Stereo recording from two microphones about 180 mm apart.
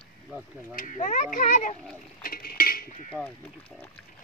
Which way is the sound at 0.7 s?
45° left (ahead or behind).